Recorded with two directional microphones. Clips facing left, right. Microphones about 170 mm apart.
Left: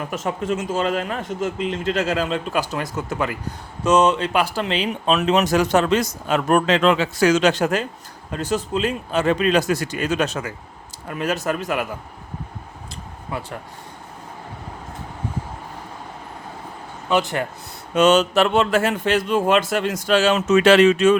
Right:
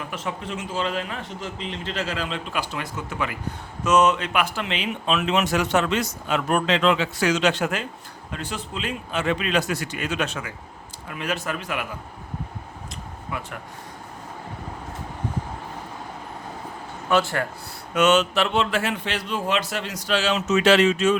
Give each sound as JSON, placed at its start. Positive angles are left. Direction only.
{"t": 0.1, "sound": "speech", "side_deg": 45}
{"t": 13.3, "sound": "speech", "side_deg": 35}
{"t": 17.1, "sound": "speech", "side_deg": 20}
{"t": 17.9, "sound": "speech", "side_deg": 35}